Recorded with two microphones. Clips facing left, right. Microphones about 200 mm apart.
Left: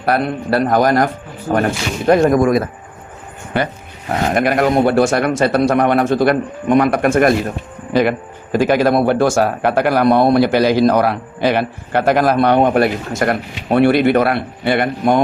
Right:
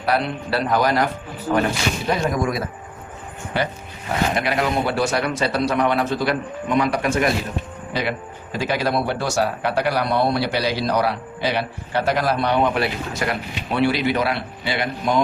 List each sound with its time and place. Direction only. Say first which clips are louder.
0.0 s speech: left 5 dB; 50° left (ahead or behind)
8.5 s speech: left 9 dB; 50° left (ahead or behind)